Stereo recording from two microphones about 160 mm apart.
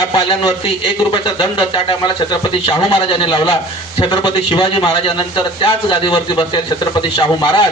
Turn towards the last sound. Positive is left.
turn(degrees=30)  # may be behind; listen again after turning